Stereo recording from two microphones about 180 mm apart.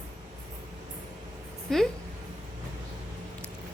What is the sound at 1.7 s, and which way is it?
Speech, centre (ahead or behind).